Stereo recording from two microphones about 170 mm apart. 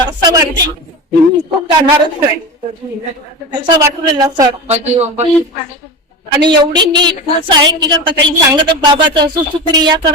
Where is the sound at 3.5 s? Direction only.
25° right (ahead or behind).